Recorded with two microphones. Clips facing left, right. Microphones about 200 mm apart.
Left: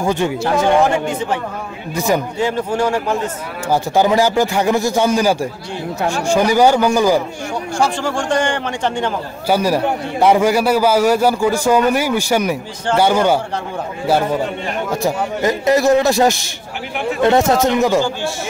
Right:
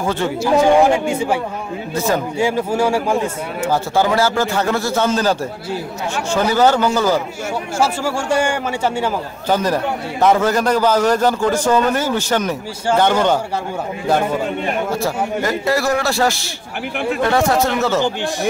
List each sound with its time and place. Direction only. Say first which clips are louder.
0.0 s a man's voice: left 2 dB; 15° left (ahead or behind)
0.6 s speech: right 2 dB; 10° right (ahead or behind)
3.7 s a man's voice: left 3 dB; 15° left (ahead or behind)
7.8 s speech: left 1 dB; 10° right (ahead or behind)
9.5 s a man's voice: left 2 dB; 10° left (ahead or behind)
15.0 s a man's voice: left 1 dB; 20° left (ahead or behind)
18.0 s speech: right 2 dB; 20° right (ahead or behind)